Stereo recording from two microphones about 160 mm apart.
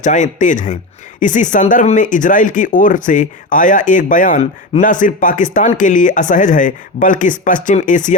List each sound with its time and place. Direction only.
0.0 s speech: 50° left (ahead or behind)